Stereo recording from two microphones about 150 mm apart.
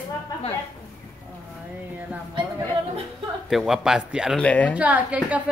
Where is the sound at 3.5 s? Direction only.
Centre (ahead or behind).